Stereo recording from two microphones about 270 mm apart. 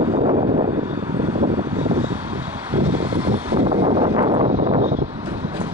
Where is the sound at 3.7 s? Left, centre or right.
Centre.